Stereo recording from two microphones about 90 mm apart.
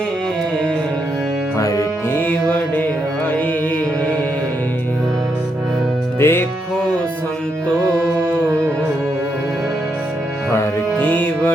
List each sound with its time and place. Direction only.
1.5 s music: 40° left (ahead or behind)
2.1 s music: 20° left (ahead or behind)
6.1 s music: 25° left (ahead or behind)
10.9 s music: 20° left (ahead or behind)